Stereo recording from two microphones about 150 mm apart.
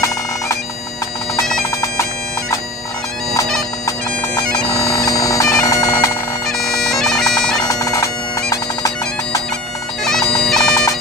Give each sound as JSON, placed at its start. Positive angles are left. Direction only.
{"t": 4.4, "sound": "bagpipes", "side_deg": 25}
{"t": 6.6, "sound": "bagpipes", "side_deg": 0}
{"t": 7.6, "sound": "bagpipes", "side_deg": 20}
{"t": 10.0, "sound": "bagpipes", "side_deg": 5}
{"t": 10.6, "sound": "bagpipes", "side_deg": 20}